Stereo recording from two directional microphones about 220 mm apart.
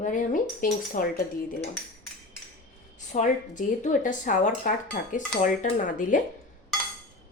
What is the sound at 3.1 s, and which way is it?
Speech, 35° left (ahead or behind).